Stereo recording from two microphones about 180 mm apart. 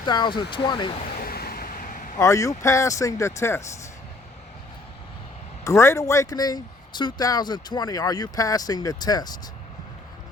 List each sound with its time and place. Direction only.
0.0 s speech: 25° left (ahead or behind)
1.2 s a sound: 55° left (ahead or behind)
2.1 s speech: 15° left (ahead or behind)
5.6 s speech: 15° left (ahead or behind)